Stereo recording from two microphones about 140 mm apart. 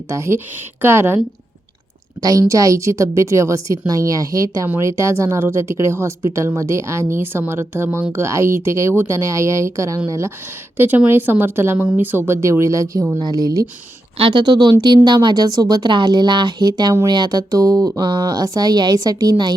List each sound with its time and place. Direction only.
0.1 s speech: 20° right (ahead or behind)
2.2 s a woman's voice: 25° right (ahead or behind)